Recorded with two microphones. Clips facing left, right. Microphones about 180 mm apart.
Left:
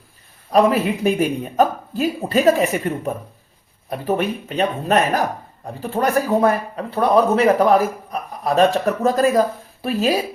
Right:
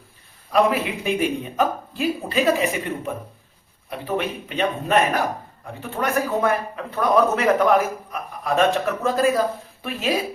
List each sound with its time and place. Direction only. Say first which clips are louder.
0.5 s speech: left 4 dB; 40° left (ahead or behind)